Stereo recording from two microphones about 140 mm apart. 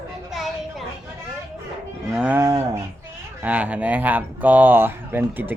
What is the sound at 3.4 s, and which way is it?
Speech, 10° right (ahead or behind).